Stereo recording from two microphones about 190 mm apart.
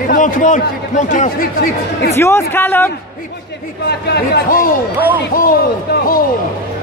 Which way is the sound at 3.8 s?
60° left (ahead or behind).